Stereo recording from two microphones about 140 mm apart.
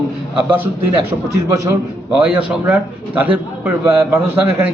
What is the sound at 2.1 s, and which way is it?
A man's voice, 10° right (ahead or behind).